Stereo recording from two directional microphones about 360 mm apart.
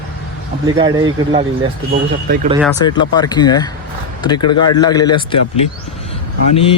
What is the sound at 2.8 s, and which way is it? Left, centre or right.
Speech, centre.